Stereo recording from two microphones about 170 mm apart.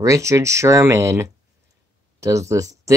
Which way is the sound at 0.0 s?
20° right (ahead or behind).